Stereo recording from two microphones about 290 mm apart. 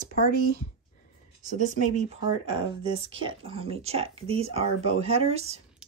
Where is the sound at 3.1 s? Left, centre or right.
Centre.